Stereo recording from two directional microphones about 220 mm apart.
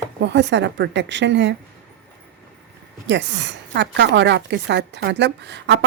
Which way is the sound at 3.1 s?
55° right (ahead or behind).